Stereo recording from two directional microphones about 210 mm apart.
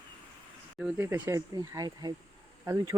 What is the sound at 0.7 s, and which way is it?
Speech, 5° right (ahead or behind).